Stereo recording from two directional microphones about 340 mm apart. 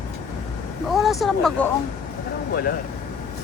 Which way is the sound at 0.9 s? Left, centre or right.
Centre.